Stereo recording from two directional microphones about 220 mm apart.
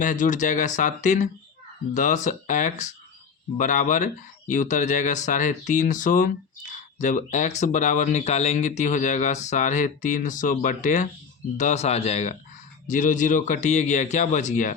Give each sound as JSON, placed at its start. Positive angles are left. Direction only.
{"t": 0.0, "sound": "speech", "side_deg": 35}